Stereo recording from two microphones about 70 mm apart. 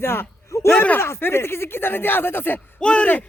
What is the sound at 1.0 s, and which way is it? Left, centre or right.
Speech, left.